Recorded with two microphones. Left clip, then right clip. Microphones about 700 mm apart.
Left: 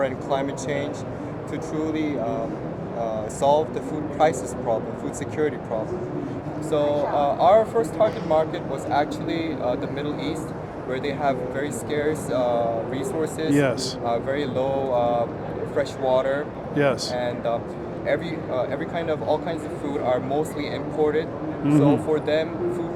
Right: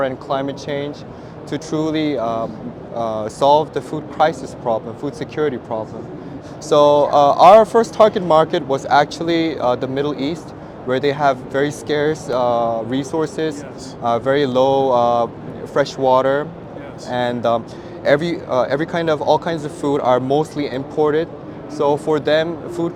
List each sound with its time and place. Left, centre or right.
0.0 s speech: right
6.7 s speech: right